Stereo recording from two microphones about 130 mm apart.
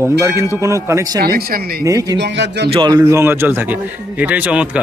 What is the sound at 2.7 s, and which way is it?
A man's voice, 30° right (ahead or behind).